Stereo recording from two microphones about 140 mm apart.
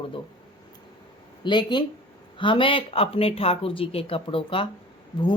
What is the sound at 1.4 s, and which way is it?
Speech, 35° left (ahead or behind).